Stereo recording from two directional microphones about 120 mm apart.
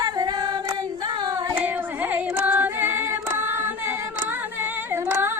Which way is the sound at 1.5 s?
15° right (ahead or behind).